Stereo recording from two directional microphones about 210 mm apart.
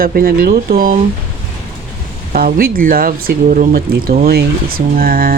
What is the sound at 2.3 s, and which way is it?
Speech, 45° right (ahead or behind).